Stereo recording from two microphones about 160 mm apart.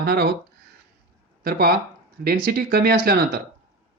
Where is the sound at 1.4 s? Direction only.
70° right (ahead or behind).